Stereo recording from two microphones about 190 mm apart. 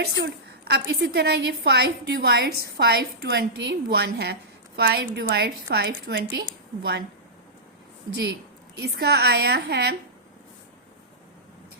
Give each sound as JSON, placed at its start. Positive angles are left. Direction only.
{"t": 0.0, "sound": "a woman's voice", "side_deg": -55}
{"t": 8.8, "sound": "a woman's voice", "side_deg": -55}